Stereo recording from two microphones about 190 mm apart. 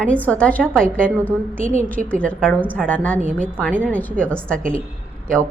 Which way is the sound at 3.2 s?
45° right (ahead or behind).